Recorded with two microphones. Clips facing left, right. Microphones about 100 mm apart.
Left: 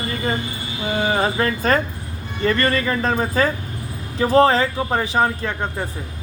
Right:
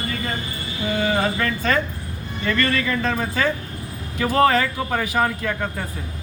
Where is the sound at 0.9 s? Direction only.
30° left (ahead or behind).